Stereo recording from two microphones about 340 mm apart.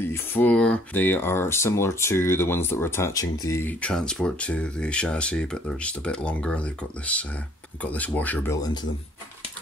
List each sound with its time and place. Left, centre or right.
0.0 s speech: centre